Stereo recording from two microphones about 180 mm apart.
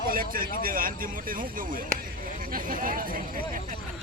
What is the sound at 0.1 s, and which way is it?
Speech, 50° right (ahead or behind).